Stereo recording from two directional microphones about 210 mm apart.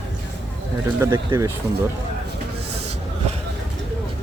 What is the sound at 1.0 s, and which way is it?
Speech, 15° right (ahead or behind).